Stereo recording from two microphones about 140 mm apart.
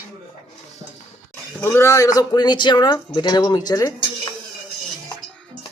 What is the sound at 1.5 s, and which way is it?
Speech, 15° left (ahead or behind).